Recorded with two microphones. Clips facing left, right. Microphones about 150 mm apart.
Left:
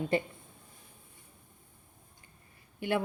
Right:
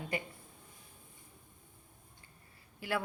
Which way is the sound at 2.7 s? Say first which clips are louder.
Left 5 dB; 20° left (ahead or behind).